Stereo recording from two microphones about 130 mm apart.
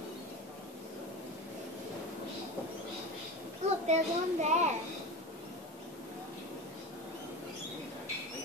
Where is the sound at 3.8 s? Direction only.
60° right (ahead or behind).